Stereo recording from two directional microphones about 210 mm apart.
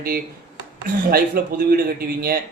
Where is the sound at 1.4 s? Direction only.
45° right (ahead or behind).